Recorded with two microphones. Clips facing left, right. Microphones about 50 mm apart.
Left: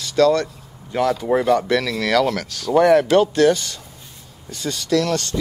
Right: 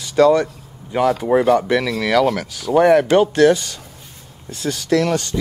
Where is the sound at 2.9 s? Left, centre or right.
Centre.